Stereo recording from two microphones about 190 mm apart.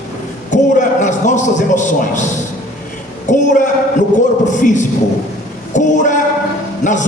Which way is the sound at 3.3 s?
40° left (ahead or behind).